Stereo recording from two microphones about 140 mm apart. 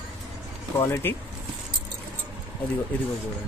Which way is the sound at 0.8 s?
20° left (ahead or behind).